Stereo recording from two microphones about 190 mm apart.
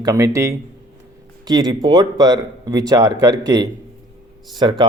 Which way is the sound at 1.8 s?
20° right (ahead or behind).